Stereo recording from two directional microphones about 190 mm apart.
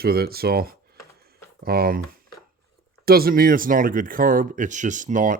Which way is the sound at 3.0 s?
50° right (ahead or behind).